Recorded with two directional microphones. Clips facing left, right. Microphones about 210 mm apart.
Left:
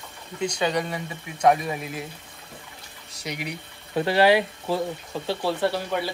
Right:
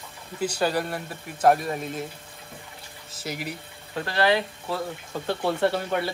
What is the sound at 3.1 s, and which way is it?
Speech, centre (ahead or behind).